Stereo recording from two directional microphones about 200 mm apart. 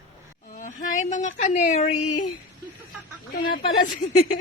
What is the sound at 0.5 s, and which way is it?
A woman's voice, 40° left (ahead or behind).